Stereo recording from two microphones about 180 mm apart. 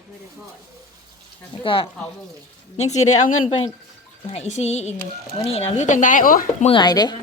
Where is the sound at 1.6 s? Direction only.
30° left (ahead or behind); by 6.6 s 50° left (ahead or behind).